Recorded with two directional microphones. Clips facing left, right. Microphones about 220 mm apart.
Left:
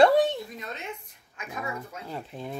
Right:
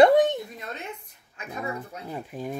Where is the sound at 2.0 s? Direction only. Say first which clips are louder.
Right 5 dB; 15° right (ahead or behind).